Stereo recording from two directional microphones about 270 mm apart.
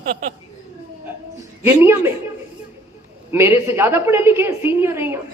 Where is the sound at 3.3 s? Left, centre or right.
Centre.